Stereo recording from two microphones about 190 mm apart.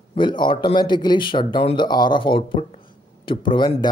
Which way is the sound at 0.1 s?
25° left (ahead or behind).